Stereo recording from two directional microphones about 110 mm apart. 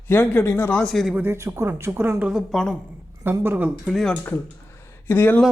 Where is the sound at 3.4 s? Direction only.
20° right (ahead or behind).